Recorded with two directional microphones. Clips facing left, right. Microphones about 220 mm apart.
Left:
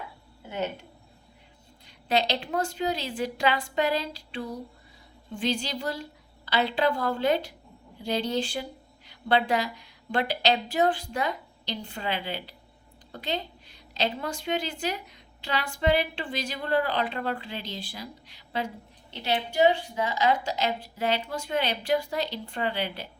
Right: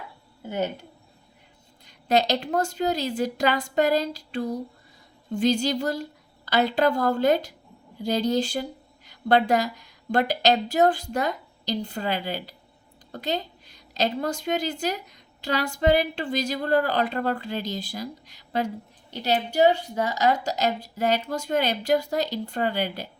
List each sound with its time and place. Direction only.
1.9 s a woman's voice: 45° right (ahead or behind)